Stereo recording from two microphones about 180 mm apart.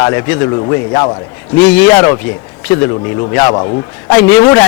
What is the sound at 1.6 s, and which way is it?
Speech, 10° left (ahead or behind).